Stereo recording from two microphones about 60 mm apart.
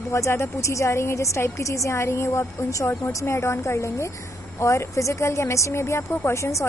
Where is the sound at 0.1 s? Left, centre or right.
Left.